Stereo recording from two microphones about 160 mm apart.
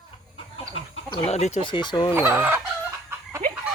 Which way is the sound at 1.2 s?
45° left (ahead or behind).